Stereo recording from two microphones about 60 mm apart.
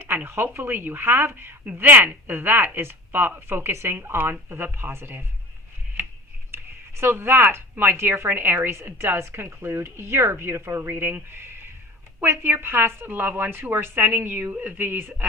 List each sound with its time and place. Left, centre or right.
0.0 s speech: right
6.5 s speech: right